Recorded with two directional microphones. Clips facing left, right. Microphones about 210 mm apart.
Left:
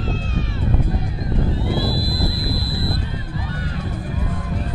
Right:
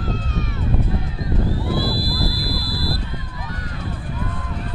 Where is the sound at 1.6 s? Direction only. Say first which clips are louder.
Even; 20° left (ahead or behind).